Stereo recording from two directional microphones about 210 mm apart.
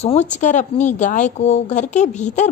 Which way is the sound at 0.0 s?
30° left (ahead or behind).